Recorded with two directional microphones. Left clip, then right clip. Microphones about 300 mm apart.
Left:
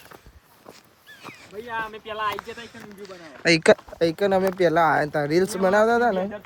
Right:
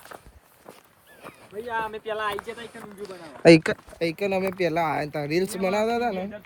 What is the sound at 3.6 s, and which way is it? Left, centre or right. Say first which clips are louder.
Speech: left 9 dB; centre.